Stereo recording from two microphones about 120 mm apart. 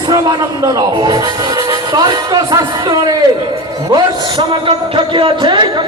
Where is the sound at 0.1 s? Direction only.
35° right (ahead or behind).